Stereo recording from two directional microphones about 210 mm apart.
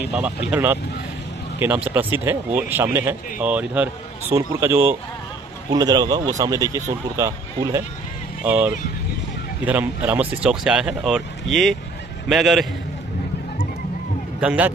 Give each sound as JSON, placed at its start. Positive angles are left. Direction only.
{"t": 0.1, "sound": "speech", "side_deg": -5}
{"t": 1.9, "sound": "speech", "side_deg": -10}
{"t": 14.4, "sound": "speech", "side_deg": -5}